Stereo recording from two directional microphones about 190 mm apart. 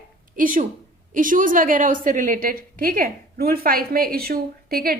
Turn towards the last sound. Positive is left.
turn(degrees=-50)  # may be behind; listen again after turning